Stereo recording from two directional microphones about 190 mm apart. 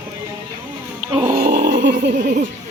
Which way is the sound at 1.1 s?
35° right (ahead or behind).